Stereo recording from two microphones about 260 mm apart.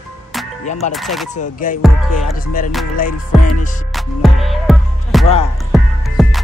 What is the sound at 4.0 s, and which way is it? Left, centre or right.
Music, centre.